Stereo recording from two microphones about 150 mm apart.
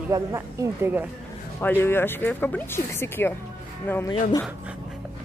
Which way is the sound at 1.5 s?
15° left (ahead or behind).